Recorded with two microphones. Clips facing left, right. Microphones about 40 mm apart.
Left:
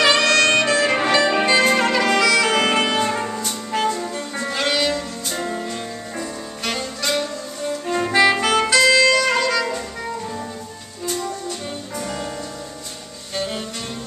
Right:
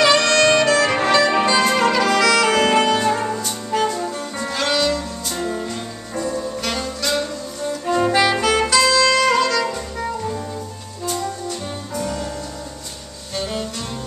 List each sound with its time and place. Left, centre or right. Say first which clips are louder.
0.0 s saxophone: right 1 dB; centre
0.5 s music: right 2 dB; left
0.9 s music: right 1 dB; centre
2.2 s saxophone: right 1 dB; centre
4.4 s music: right 1 dB; centre
8.8 s music: left 1 dB; left
9.5 s saxophone: even; centre
12.0 s music: right 3 dB; centre
13.4 s music: right 1 dB; centre